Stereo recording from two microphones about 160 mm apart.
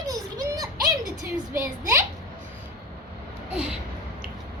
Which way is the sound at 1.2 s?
60° right (ahead or behind).